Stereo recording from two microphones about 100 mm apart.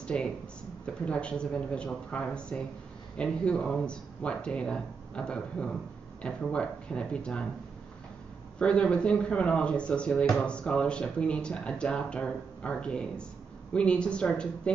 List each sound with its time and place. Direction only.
0.0 s speech: 10° left (ahead or behind)
8.5 s speech: 10° left (ahead or behind)